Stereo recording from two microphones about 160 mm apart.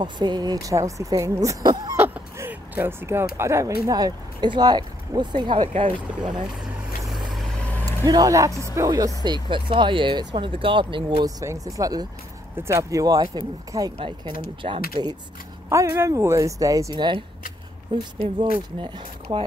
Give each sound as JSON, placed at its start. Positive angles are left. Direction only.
{"t": 0.0, "sound": "speech", "side_deg": -25}
{"t": 2.0, "sound": "a sound", "side_deg": -15}
{"t": 3.3, "sound": "speech", "side_deg": -15}
{"t": 7.1, "sound": "vehicle", "side_deg": 0}
{"t": 7.8, "sound": "speech", "side_deg": -20}
{"t": 11.2, "sound": "speech", "side_deg": -20}
{"t": 13.9, "sound": "speech", "side_deg": -35}
{"t": 14.6, "sound": "speech", "side_deg": -45}
{"t": 15.7, "sound": "speech", "side_deg": -20}